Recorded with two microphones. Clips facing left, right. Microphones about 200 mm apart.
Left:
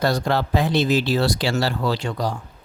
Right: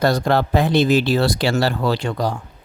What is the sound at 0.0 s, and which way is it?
Speech, 55° right (ahead or behind).